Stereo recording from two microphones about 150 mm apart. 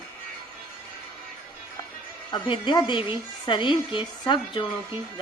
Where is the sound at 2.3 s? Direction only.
30° left (ahead or behind).